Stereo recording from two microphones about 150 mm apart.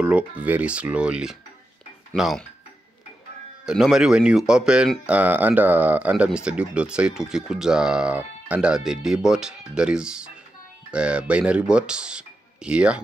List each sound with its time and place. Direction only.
0.0 s speech: 10° right (ahead or behind)
3.6 s speech: 5° right (ahead or behind)